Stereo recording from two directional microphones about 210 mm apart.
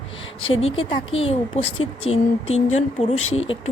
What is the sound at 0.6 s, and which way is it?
A woman's voice, 25° left (ahead or behind).